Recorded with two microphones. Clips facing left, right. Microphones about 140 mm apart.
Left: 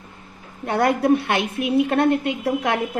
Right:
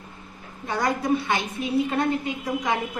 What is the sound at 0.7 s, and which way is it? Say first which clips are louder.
A woman's voice: left 6 dB; 60° left (ahead or behind).